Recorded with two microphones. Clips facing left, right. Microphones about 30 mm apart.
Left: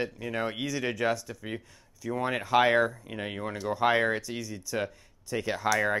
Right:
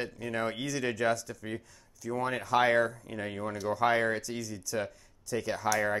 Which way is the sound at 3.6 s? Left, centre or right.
Centre.